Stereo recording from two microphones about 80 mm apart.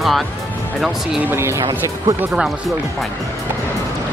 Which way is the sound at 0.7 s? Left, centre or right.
Centre.